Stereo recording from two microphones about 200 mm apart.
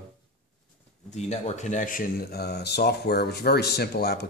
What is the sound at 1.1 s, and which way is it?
Speech, 35° left (ahead or behind).